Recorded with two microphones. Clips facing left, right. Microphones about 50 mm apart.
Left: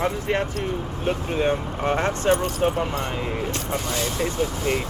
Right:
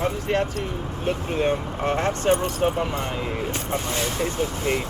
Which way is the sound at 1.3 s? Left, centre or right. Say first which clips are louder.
Even; centre.